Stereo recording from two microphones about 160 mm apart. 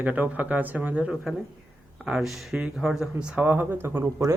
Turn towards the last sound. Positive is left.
turn(degrees=-15)  # may be behind; listen again after turning